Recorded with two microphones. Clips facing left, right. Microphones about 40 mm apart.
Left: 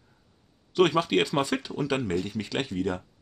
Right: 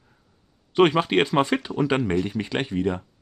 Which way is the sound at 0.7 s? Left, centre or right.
Right.